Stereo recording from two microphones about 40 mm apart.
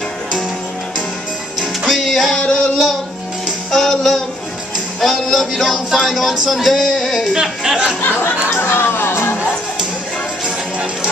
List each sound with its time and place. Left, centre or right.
1.9 s music: centre
2.3 s a sound: centre
3.7 s music: centre
7.2 s speech: centre
8.5 s music: left
10.4 s music: centre